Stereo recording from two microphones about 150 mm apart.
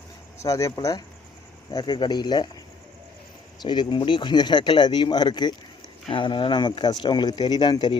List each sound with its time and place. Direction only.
0.4 s speech: 20° left (ahead or behind)
3.6 s speech: 30° left (ahead or behind)